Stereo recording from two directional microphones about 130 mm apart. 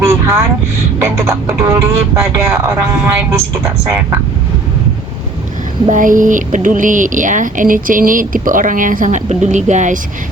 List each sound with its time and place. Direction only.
0.0 s vehicle: 20° right (ahead or behind)
1.0 s speech: 20° right (ahead or behind)
5.9 s speech: 90° right; by 10.0 s 65° right (ahead or behind)